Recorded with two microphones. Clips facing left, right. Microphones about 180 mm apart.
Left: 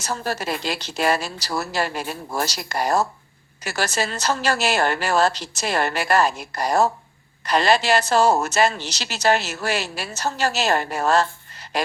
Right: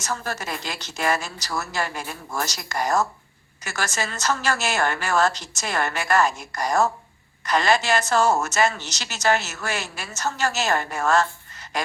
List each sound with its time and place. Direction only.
0.0 s a woman's voice: 30° left (ahead or behind)